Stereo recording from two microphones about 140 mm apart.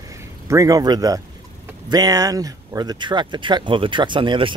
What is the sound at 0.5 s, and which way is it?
A man's voice, 25° right (ahead or behind).